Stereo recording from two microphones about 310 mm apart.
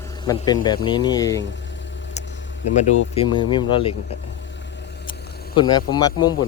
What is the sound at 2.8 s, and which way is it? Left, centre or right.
A man's voice, centre.